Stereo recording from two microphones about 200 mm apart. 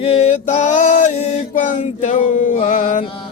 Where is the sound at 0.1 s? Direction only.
35° left (ahead or behind).